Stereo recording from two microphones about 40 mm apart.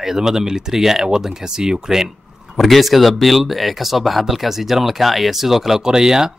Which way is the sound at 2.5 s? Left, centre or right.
Centre.